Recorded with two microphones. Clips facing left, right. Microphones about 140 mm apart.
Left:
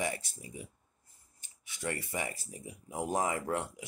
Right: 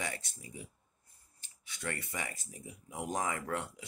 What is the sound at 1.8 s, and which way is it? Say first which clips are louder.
Speech: left 4 dB; 25° left (ahead or behind).